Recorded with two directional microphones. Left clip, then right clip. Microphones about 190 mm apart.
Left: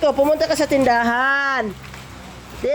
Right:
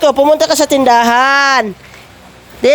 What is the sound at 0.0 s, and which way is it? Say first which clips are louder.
Speech: right 7 dB; 40° right (ahead or behind).